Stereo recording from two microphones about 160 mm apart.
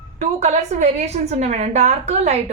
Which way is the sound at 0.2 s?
45° right (ahead or behind).